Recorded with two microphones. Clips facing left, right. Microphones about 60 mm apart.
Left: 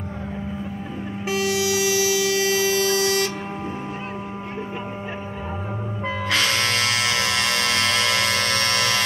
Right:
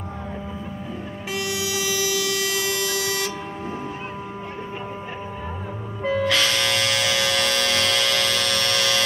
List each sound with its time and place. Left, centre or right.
1.9 s music: left
6.0 s music: left